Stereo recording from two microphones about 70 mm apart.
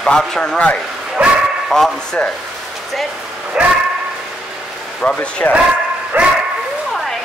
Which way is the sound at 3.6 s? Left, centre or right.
Centre.